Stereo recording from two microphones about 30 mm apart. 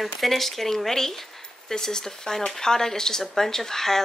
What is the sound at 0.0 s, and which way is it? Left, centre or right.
Speech, centre.